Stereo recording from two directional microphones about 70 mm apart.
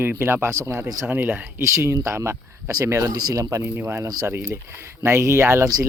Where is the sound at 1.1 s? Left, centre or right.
Right.